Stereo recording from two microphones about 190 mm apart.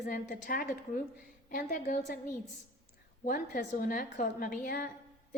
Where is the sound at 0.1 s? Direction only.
50° left (ahead or behind).